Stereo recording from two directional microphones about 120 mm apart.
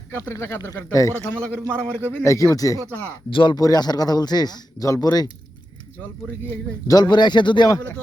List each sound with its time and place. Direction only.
0.1 s speech: 20° left (ahead or behind)
1.2 s a man's voice: 10° left (ahead or behind)
1.9 s speech: 20° right (ahead or behind)
2.2 s speech: 25° left (ahead or behind)
3.2 s speech: 40° left (ahead or behind)
6.8 s speech: 35° left (ahead or behind)
7.7 s a man's voice: 15° left (ahead or behind)